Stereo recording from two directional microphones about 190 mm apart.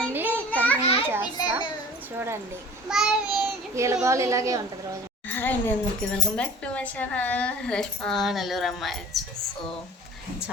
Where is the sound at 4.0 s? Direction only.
15° right (ahead or behind).